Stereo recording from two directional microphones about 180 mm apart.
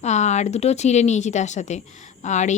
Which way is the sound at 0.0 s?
40° left (ahead or behind).